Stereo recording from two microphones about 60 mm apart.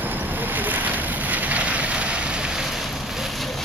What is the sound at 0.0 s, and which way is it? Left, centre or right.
Boat, right.